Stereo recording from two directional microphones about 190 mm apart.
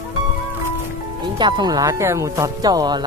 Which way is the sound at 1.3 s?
25° right (ahead or behind).